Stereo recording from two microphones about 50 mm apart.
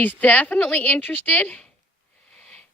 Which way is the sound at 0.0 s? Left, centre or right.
Left.